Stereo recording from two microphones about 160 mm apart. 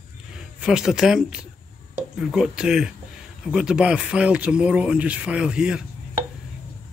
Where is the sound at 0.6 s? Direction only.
5° right (ahead or behind).